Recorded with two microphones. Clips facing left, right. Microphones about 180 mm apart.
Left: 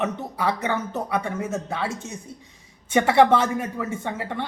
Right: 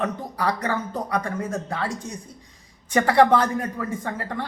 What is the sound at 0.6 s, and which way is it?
Speech, 25° left (ahead or behind).